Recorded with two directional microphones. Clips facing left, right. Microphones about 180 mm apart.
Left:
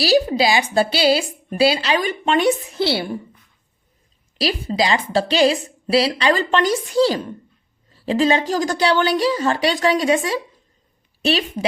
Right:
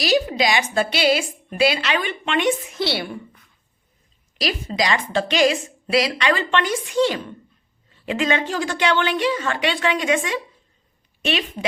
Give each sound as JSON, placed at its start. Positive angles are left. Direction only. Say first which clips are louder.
{"t": 0.0, "sound": "a woman's voice", "louder": "left 3 dB", "side_deg": 30}
{"t": 4.4, "sound": "a woman's voice", "louder": "left 3 dB", "side_deg": 30}